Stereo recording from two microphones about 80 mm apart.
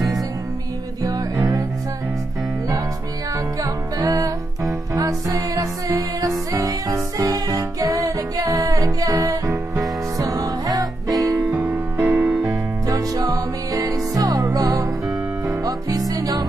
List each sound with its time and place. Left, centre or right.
1.0 s music: right
3.6 s music: right
11.5 s music: right
12.4 s music: right